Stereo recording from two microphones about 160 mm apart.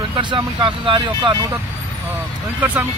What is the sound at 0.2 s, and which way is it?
Speech, 30° right (ahead or behind).